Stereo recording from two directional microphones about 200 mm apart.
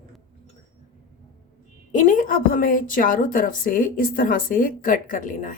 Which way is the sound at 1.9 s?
40° left (ahead or behind).